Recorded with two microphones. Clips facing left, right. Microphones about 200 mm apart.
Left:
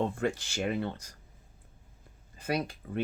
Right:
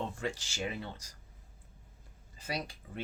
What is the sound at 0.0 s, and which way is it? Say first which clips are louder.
Speech: left 7 dB; 55° left (ahead or behind).